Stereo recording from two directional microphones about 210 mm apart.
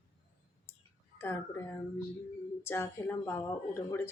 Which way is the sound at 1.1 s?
10° left (ahead or behind).